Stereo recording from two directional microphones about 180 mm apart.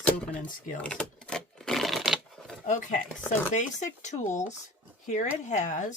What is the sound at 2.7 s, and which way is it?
Speech, 45° left (ahead or behind).